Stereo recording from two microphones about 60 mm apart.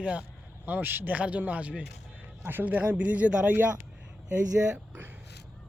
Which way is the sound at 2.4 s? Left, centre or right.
Right.